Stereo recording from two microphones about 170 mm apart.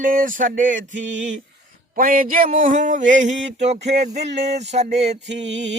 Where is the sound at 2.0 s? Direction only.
55° right (ahead or behind).